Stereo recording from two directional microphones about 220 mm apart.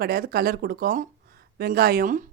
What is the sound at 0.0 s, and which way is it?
Speech, 45° right (ahead or behind).